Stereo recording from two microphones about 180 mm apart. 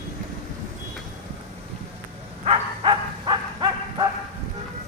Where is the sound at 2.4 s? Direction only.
25° right (ahead or behind).